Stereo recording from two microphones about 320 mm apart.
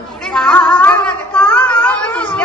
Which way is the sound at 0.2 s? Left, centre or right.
Centre.